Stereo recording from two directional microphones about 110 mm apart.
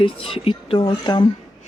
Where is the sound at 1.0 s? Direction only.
40° left (ahead or behind).